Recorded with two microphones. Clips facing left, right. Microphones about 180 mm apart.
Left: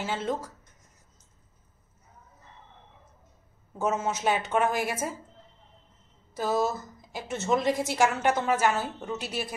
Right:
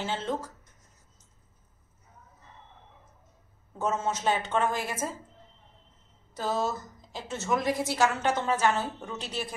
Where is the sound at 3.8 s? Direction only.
10° left (ahead or behind).